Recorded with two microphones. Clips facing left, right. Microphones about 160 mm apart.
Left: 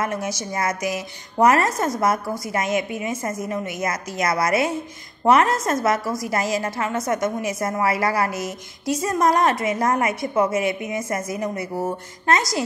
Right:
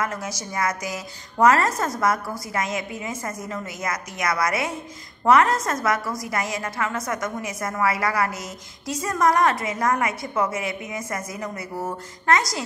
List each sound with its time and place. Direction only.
0.0 s a woman's voice: 25° left (ahead or behind)